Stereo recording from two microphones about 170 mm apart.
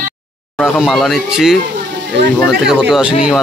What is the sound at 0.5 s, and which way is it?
Speech, centre (ahead or behind).